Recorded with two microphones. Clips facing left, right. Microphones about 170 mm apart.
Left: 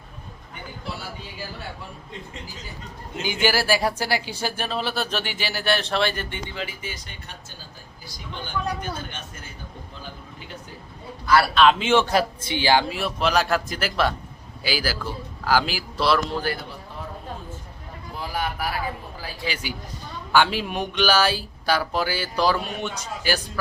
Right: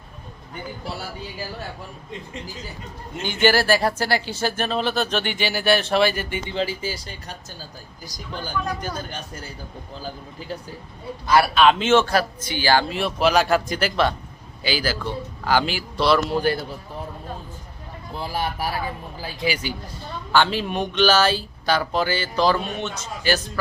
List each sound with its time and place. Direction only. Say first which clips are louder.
3.2 s speech: right 4 dB; 10° left (ahead or behind)
6.5 s speech: right 8 dB; 30° right (ahead or behind)
11.5 s a man's voice: even; centre (ahead or behind)
11.8 s speech: right 2 dB; 15° left (ahead or behind)
12.9 s a man's voice: right 3 dB; centre (ahead or behind)
16.3 s speech: right 5 dB; 20° right (ahead or behind)
18.2 s speech: right 2 dB; 30° right (ahead or behind)
20.3 s speech: right 1 dB; 10° left (ahead or behind)